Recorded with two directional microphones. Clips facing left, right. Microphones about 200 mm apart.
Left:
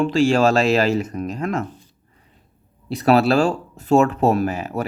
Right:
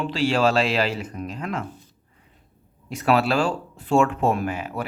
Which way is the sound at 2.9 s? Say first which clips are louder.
Left 5 dB; 35° left (ahead or behind).